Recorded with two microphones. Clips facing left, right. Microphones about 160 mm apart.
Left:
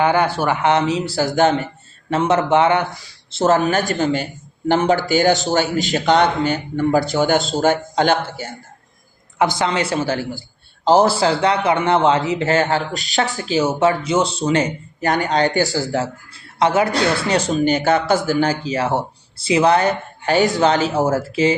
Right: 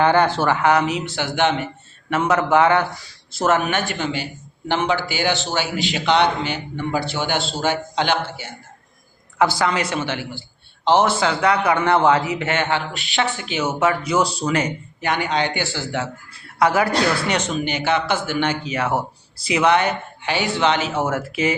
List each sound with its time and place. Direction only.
0.0 s a man's voice: 10° left (ahead or behind); by 1.6 s 40° left (ahead or behind)
2.0 s a man's voice: 30° left (ahead or behind); by 8.5 s 45° left (ahead or behind)
9.4 s a man's voice: 20° left (ahead or behind)
15.0 s speech: 40° left (ahead or behind)
16.6 s speech: 25° left (ahead or behind)